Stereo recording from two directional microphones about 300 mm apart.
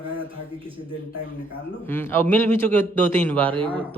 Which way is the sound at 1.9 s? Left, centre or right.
Centre.